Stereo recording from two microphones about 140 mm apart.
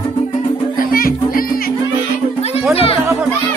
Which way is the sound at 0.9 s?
90° left.